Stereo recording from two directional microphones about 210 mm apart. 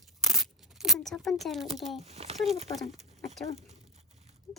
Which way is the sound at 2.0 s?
30° right (ahead or behind).